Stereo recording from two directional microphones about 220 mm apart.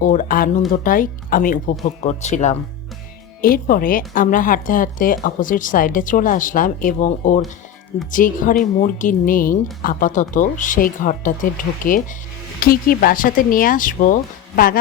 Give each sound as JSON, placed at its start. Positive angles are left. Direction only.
{"t": 0.0, "sound": "speech", "side_deg": 35}